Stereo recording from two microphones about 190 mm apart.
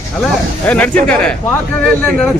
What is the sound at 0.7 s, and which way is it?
Speech, 5° left (ahead or behind).